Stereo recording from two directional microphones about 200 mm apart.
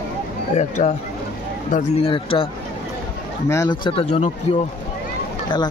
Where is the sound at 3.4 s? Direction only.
15° left (ahead or behind); by 4.3 s 30° left (ahead or behind).